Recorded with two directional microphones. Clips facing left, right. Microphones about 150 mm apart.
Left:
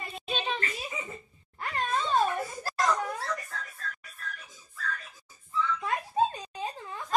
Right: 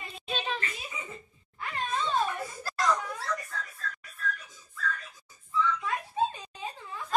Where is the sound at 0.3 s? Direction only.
Centre (ahead or behind).